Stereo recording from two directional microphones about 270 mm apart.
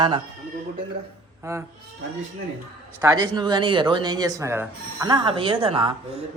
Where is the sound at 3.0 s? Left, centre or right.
Centre.